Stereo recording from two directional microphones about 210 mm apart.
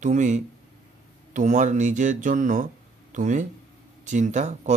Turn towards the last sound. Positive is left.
turn(degrees=-35)  # may be behind; listen again after turning